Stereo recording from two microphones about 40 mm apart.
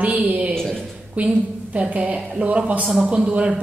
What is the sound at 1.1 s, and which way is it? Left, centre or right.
A woman's voice, right.